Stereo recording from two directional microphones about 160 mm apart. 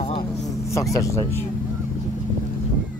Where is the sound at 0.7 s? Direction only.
20° left (ahead or behind).